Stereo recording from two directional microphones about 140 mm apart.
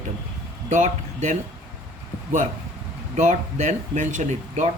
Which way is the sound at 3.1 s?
55° right (ahead or behind).